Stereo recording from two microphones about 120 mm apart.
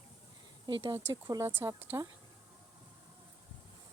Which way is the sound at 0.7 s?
45° right (ahead or behind).